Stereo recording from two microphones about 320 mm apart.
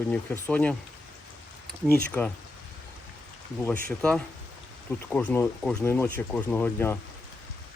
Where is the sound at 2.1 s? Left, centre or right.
Centre.